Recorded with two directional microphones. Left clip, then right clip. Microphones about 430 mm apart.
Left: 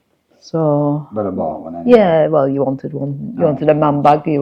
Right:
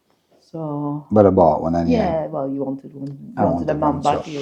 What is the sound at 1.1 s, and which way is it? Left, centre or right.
Speech, right.